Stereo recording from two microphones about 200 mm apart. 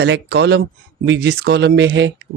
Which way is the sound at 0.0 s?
55° right (ahead or behind).